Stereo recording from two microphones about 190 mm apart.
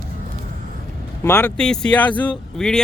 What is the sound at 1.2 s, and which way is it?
Speech, 15° left (ahead or behind).